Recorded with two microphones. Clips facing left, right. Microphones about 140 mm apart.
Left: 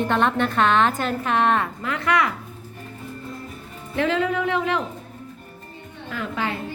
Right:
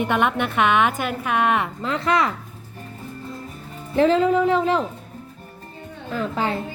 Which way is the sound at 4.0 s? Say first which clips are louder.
Right 5 dB; 35° right (ahead or behind).